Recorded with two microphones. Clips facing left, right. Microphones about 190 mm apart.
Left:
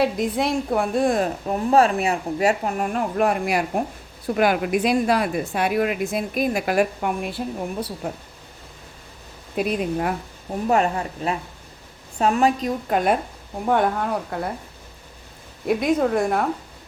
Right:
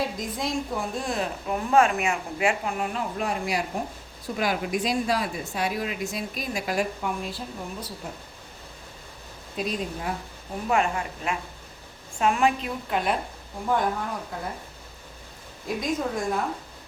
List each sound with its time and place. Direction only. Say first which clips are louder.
0.0 s a woman's voice: left 8 dB; 65° left (ahead or behind)
9.6 s a woman's voice: left 7 dB; 60° left (ahead or behind)
10.7 s a woman's voice: left 4 dB; 40° left (ahead or behind)
13.7 s a woman's voice: left 5 dB; 60° left (ahead or behind)
15.6 s a woman's voice: left 8 dB; 65° left (ahead or behind)